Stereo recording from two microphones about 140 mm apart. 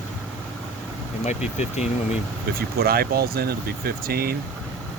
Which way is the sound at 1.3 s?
55° left (ahead or behind).